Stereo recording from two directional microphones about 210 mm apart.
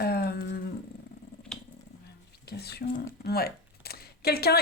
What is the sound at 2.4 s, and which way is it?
Speech, 50° left (ahead or behind).